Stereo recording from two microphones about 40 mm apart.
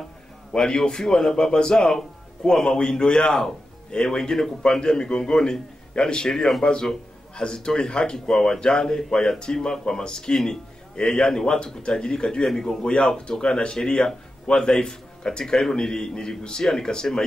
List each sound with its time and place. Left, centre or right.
0.5 s a man's voice: centre